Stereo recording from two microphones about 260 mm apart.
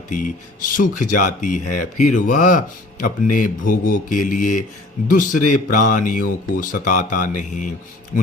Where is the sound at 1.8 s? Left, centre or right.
Left.